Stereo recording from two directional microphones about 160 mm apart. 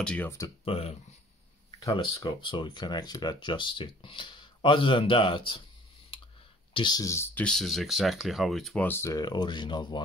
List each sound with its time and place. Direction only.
0.0 s speech: 10° left (ahead or behind)
0.7 s speech: 40° left (ahead or behind)
2.1 s speech: 25° left (ahead or behind)
6.7 s speech: 25° left (ahead or behind)
7.4 s speech: centre (ahead or behind)
8.8 s speech: 15° left (ahead or behind)